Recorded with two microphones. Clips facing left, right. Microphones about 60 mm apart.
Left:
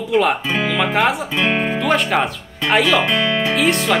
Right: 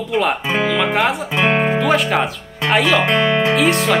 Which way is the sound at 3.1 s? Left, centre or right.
Right.